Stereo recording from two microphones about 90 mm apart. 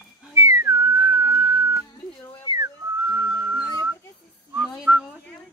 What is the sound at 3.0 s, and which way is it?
Whistling, 20° right (ahead or behind).